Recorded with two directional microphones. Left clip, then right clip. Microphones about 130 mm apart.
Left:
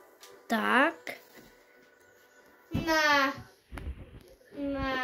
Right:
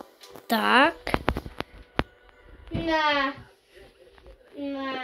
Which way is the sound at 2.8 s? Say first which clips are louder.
Right 2 dB; 50° left (ahead or behind).